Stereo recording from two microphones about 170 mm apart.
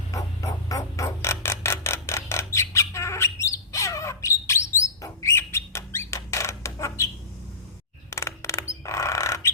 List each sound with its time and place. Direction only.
0.1 s music: 20° left (ahead or behind)
3.3 s bird: 20° left (ahead or behind)
8.1 s a sound: 15° left (ahead or behind)